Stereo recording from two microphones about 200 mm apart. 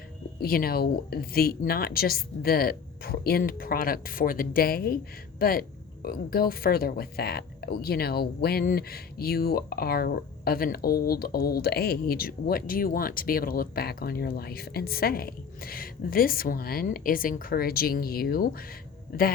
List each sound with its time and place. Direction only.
0.3 s speech: 45° left (ahead or behind)